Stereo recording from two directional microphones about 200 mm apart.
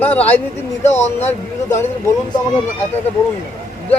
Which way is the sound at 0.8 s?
35° left (ahead or behind).